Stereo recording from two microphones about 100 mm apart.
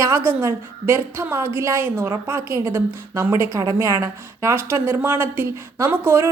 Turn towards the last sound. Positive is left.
turn(degrees=-25)  # may be behind; listen again after turning